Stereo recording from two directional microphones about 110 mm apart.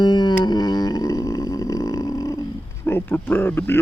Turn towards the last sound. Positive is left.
turn(degrees=20)  # may be behind; listen again after turning